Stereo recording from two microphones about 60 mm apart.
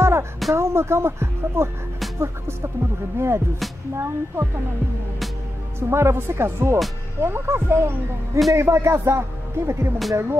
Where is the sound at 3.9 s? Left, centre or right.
Right.